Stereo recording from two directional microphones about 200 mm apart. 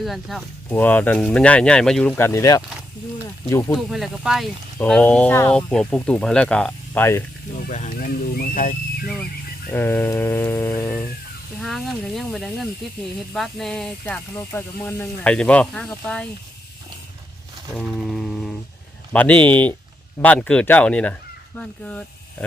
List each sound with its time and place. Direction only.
0.0 s speech: centre (ahead or behind)
3.8 s speech: centre (ahead or behind)
7.5 s speech: 40° left (ahead or behind)
9.6 s speech: 10° left (ahead or behind)
17.7 s a sound: centre (ahead or behind)
19.1 s speech: 5° left (ahead or behind)